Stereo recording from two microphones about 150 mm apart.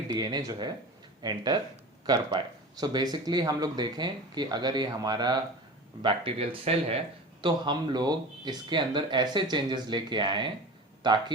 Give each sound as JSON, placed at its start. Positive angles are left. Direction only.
{"t": 0.1, "sound": "speech", "side_deg": -25}